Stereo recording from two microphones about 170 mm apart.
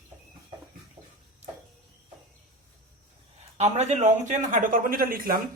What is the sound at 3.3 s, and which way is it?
A man's voice, 40° right (ahead or behind).